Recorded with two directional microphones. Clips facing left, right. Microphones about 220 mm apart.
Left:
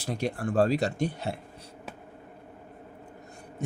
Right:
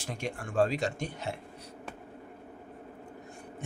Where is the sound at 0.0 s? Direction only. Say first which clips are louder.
Left 7 dB; 35° left (ahead or behind).